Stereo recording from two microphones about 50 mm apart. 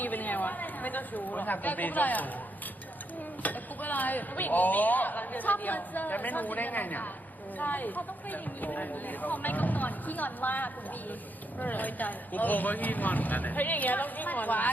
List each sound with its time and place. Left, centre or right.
0.0 s speech: left
3.4 s speech: left